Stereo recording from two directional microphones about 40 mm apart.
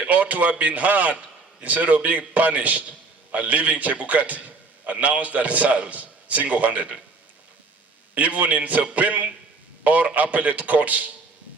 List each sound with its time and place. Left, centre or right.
0.1 s a man's voice: right
8.1 s a man's voice: right